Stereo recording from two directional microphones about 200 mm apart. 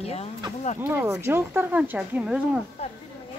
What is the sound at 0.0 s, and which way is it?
Speech, 30° left (ahead or behind).